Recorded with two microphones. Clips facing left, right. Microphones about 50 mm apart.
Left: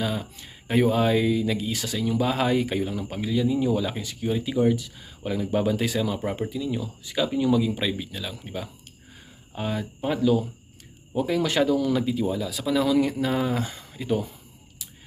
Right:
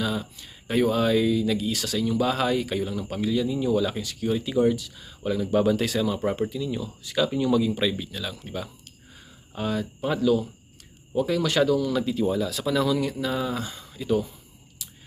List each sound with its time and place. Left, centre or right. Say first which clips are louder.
0.0 s speech: even; left
3.1 s speech: even; centre
7.3 s speech: left 2 dB; centre
12.8 s speech: left 2 dB; left